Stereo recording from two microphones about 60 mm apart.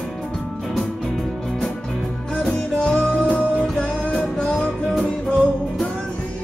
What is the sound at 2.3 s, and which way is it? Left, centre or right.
Music, centre.